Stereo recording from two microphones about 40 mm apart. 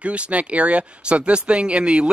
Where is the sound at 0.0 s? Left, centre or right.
Right.